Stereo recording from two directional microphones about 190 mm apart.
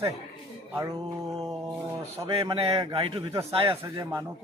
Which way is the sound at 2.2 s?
30° right (ahead or behind).